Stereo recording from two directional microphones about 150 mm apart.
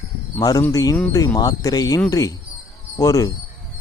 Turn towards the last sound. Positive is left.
turn(degrees=20)  # may be behind; listen again after turning